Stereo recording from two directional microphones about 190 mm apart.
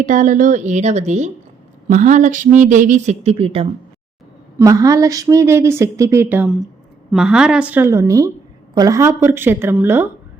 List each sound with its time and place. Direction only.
0.0 s speech: 40° right (ahead or behind)
4.5 s a woman's voice: 15° right (ahead or behind)